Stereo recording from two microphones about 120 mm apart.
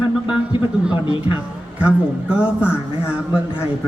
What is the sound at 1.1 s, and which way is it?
A man's voice, 10° right (ahead or behind).